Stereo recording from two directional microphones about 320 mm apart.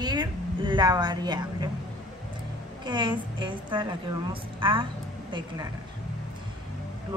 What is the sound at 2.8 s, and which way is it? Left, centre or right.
Speech, centre.